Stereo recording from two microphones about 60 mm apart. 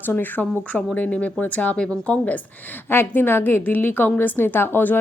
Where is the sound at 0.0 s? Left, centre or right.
Left.